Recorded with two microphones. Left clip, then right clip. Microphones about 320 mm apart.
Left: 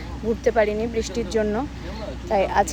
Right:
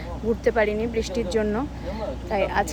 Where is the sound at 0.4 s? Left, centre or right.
Centre.